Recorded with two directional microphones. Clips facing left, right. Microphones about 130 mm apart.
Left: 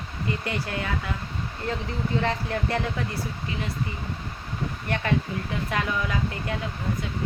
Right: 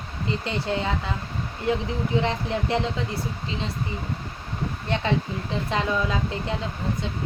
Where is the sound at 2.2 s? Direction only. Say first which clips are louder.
Right 1 dB; 20° right (ahead or behind).